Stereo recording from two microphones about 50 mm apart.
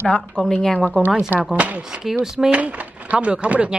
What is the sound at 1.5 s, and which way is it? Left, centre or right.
Speech, right.